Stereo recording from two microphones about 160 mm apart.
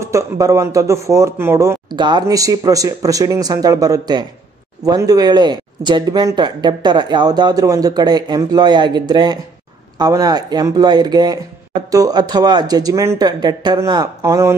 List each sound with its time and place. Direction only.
0.0 s speech: 20° right (ahead or behind)